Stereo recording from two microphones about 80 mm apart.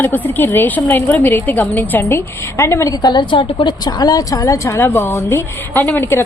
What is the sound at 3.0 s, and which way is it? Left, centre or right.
A woman's voice, left.